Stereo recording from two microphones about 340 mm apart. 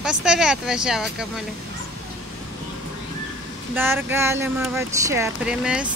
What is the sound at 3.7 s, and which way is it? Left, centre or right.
Speech, centre.